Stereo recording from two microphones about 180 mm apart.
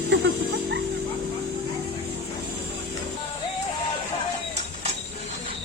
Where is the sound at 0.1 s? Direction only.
90° right.